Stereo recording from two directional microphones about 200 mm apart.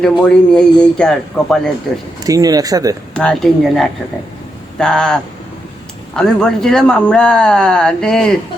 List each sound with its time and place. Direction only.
0.0 s speech: 5° left (ahead or behind)
2.2 s speech: 20° right (ahead or behind)
3.2 s speech: 5° left (ahead or behind)